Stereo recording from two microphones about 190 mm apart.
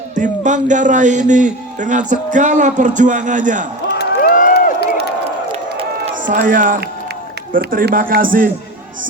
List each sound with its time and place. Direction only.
0.2 s a man's voice: 40° right (ahead or behind)
3.9 s crowd: 50° left (ahead or behind)
5.5 s run: 30° right (ahead or behind)
6.2 s speech: 45° right (ahead or behind)